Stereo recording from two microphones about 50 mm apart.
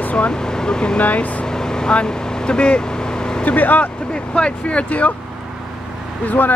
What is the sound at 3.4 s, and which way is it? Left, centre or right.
Speech, left.